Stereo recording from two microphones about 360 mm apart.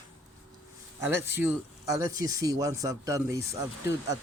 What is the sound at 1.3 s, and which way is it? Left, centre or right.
Speech, centre.